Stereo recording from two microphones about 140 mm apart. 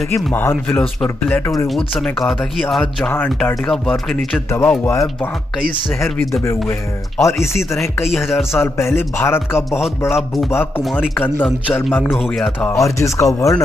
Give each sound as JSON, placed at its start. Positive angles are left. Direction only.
{"t": 0.1, "sound": "speech", "side_deg": 15}
{"t": 3.1, "sound": "speech", "side_deg": 15}
{"t": 4.6, "sound": "speech", "side_deg": 15}
{"t": 7.2, "sound": "speech", "side_deg": 20}
{"t": 7.7, "sound": "speech", "side_deg": 0}
{"t": 8.5, "sound": "speech", "side_deg": 20}